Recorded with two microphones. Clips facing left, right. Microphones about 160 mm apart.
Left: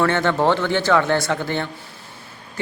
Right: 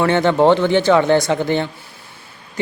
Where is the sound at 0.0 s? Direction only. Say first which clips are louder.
Right 5 dB; 15° right (ahead or behind).